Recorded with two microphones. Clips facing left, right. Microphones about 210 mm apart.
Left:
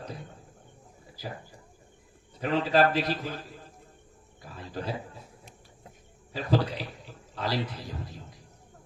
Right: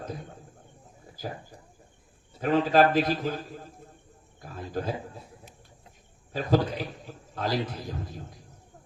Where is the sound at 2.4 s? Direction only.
45° right (ahead or behind).